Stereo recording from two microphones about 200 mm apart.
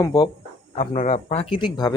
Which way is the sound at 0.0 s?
20° left (ahead or behind).